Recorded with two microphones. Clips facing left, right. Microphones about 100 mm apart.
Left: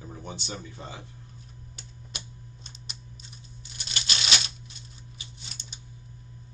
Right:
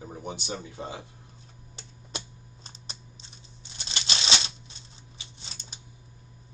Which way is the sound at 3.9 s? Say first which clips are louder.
Right 1 dB; 30° right (ahead or behind).